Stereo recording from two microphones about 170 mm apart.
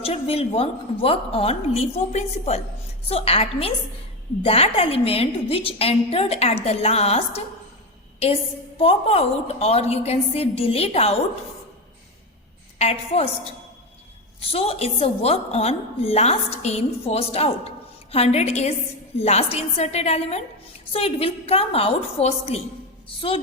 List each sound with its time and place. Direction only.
0.0 s a woman's voice: 35° left (ahead or behind)
8.8 s a woman's voice: 35° left (ahead or behind)
12.8 s a woman's voice: 35° left (ahead or behind)
14.4 s a woman's voice: 35° left (ahead or behind)